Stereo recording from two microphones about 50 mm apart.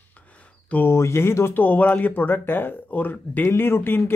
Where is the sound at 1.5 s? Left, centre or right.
Left.